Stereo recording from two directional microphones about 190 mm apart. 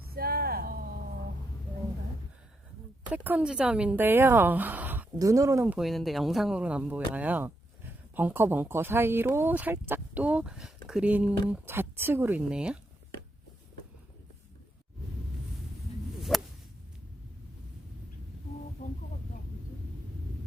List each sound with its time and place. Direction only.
0.1 s a sound: 55° right (ahead or behind)
3.1 s speech: 10° right (ahead or behind)
16.3 s whip: centre (ahead or behind)